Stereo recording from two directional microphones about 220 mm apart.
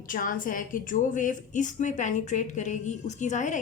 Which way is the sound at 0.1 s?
40° left (ahead or behind).